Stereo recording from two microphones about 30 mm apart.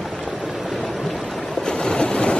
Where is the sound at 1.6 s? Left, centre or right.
Left.